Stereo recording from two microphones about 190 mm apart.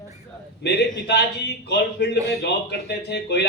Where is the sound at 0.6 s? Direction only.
60° left (ahead or behind).